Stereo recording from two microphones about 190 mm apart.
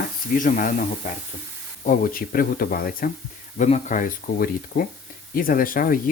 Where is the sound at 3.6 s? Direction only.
40° left (ahead or behind).